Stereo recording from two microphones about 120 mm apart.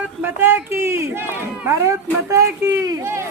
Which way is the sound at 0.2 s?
15° right (ahead or behind).